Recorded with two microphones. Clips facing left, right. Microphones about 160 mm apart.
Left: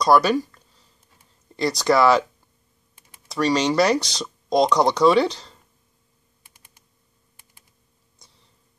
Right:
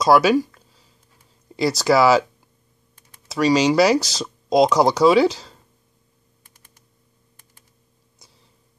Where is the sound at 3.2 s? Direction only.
5° right (ahead or behind).